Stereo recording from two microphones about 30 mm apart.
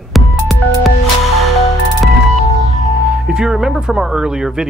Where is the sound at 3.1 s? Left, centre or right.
Right.